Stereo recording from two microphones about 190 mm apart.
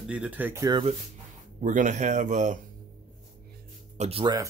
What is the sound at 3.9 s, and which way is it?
Speech, 35° right (ahead or behind).